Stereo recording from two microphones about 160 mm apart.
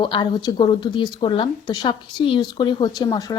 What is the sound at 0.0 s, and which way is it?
A woman's voice, 30° left (ahead or behind).